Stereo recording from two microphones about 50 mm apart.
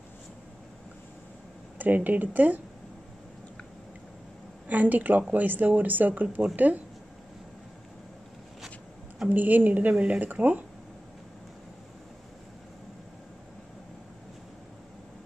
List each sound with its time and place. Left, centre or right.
1.8 s a woman's voice: right
4.6 s a woman's voice: right
9.3 s a woman's voice: right